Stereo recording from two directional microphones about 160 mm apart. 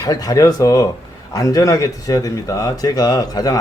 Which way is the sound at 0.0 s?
25° left (ahead or behind).